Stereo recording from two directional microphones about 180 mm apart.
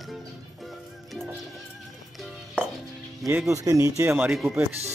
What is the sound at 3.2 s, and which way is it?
Speech, 15° right (ahead or behind).